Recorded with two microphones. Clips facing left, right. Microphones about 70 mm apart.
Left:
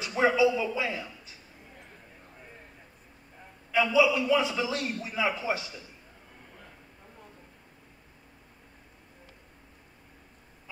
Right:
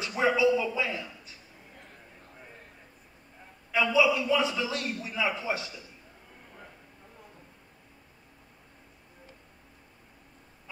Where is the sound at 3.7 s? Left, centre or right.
Left.